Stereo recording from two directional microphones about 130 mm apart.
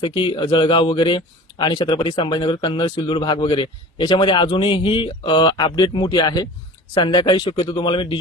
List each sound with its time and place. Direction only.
0.0 s a man's voice: 40° left (ahead or behind)